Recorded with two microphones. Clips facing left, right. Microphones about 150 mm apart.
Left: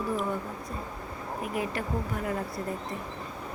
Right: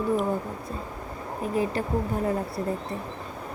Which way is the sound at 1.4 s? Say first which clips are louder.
Right 6 dB; 30° right (ahead or behind).